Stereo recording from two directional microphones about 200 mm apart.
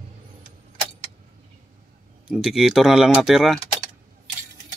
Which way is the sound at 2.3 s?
Centre (ahead or behind).